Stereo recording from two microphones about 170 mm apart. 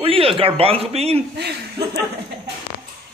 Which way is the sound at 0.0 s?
35° right (ahead or behind).